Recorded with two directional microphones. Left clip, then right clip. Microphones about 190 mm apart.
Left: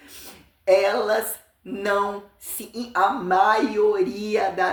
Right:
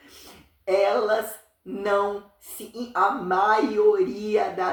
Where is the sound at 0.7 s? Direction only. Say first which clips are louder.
Left 2 dB; 55° left (ahead or behind).